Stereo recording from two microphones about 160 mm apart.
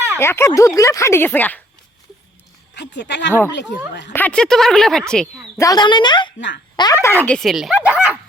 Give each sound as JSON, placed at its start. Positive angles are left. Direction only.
{"t": 0.2, "sound": "speech", "side_deg": 15}
{"t": 2.7, "sound": "speech", "side_deg": 90}
{"t": 4.1, "sound": "speech", "side_deg": 10}
{"t": 5.5, "sound": "speech", "side_deg": 20}